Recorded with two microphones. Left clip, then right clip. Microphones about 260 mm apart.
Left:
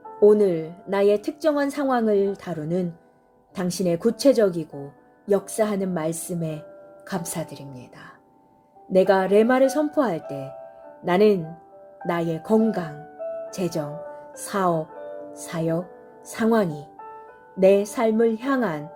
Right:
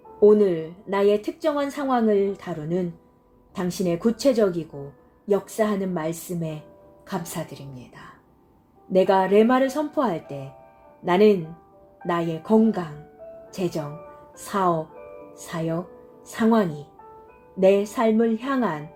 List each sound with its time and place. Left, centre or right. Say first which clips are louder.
0.2 s a woman's voice: even; left